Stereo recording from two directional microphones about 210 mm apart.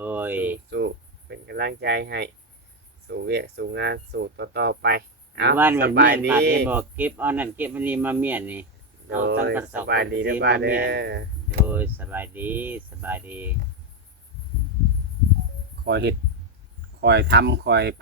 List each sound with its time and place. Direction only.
0.0 s a sound: 10° right (ahead or behind)
0.7 s a sound: 55° right (ahead or behind)
3.1 s speech: 50° right (ahead or behind)
5.5 s speech: 10° right (ahead or behind)
5.8 s speech: 50° right (ahead or behind)
6.7 s speech: 10° right (ahead or behind)
9.2 s speech: 45° right (ahead or behind)
9.8 s speech: 55° right (ahead or behind)
11.4 s speech: 10° right (ahead or behind)
15.8 s speech: 50° right (ahead or behind)